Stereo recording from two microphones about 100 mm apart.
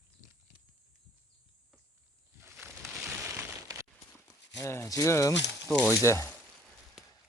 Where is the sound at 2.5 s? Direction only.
25° right (ahead or behind).